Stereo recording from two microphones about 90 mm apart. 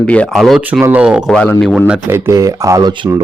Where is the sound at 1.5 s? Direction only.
Centre (ahead or behind).